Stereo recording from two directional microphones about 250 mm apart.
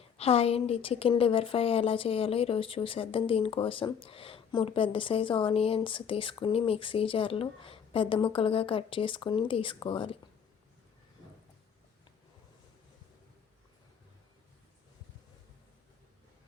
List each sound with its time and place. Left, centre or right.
0.0 s a woman's voice: left